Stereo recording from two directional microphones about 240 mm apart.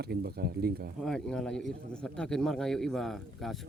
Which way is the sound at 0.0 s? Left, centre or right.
Right.